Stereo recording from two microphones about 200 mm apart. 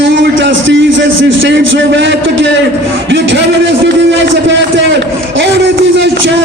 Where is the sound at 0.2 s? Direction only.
65° right (ahead or behind).